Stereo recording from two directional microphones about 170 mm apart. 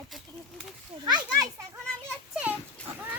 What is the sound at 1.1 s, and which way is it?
Children playing, 25° right (ahead or behind).